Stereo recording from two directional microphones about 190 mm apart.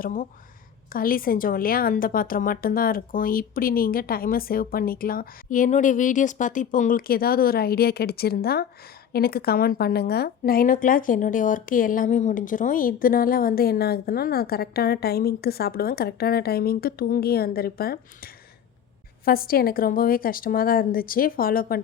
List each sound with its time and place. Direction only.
0.0 s a woman's voice: 45° left (ahead or behind)